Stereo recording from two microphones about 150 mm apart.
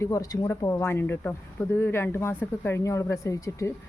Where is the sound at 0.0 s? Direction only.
20° left (ahead or behind).